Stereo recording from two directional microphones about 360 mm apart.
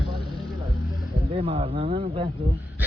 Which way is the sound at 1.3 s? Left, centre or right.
Centre.